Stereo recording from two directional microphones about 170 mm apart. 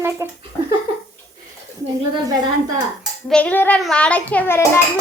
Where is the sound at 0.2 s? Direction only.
15° right (ahead or behind).